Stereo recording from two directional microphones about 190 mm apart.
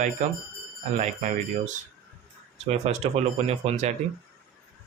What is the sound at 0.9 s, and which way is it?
Speech, 40° right (ahead or behind).